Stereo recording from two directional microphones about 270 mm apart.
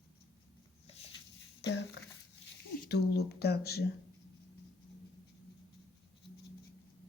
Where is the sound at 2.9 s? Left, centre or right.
Left.